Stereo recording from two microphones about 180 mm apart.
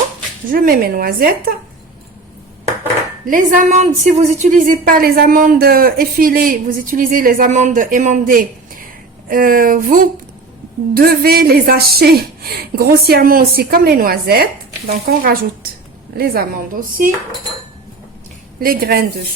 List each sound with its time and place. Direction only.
0.4 s a woman's voice: 50° right (ahead or behind)
3.2 s a woman's voice: 45° right (ahead or behind)
18.6 s a woman's voice: 55° right (ahead or behind)